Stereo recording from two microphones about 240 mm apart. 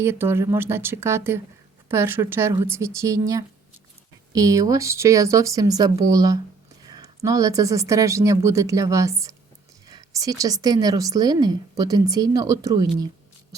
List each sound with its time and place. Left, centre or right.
0.0 s speech: centre